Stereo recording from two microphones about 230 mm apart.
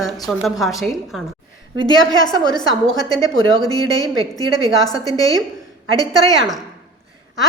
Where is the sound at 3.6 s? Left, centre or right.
Centre.